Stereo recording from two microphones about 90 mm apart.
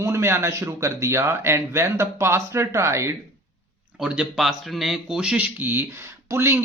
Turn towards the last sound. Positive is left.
turn(degrees=-25)  # may be behind; listen again after turning